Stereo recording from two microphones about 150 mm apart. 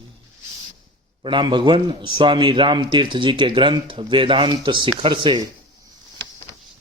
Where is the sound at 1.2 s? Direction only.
30° right (ahead or behind).